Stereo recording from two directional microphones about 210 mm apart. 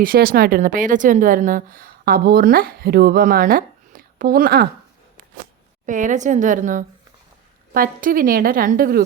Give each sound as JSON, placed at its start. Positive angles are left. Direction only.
{"t": 0.0, "sound": "a woman's voice", "side_deg": -45}
{"t": 5.8, "sound": "a woman's voice", "side_deg": -35}